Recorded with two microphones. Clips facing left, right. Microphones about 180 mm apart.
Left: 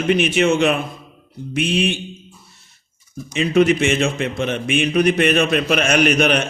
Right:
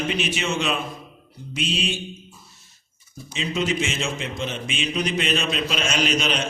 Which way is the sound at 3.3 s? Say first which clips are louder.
Left 10 dB; 65° left (ahead or behind).